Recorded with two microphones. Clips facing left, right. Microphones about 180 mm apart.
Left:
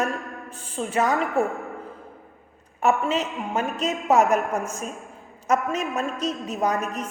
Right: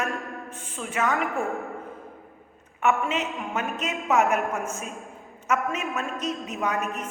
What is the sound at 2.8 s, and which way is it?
A woman's voice, 35° left (ahead or behind).